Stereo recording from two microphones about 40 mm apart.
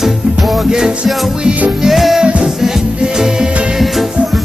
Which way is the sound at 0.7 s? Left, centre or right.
Centre.